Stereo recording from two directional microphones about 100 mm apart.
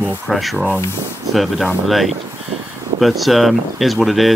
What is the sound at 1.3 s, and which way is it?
Speech, centre (ahead or behind).